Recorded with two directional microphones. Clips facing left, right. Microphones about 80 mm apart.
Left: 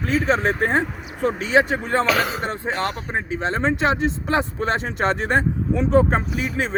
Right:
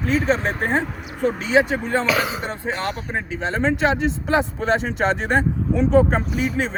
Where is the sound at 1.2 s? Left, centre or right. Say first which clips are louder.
Even; left.